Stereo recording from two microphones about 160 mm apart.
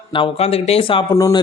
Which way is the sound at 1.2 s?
20° left (ahead or behind).